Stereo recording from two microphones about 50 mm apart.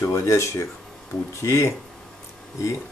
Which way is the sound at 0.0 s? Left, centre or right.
Left.